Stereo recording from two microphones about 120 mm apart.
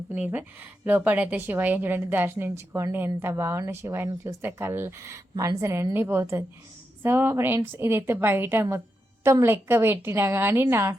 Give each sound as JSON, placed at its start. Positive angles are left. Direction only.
{"t": 0.1, "sound": "a woman's voice", "side_deg": -15}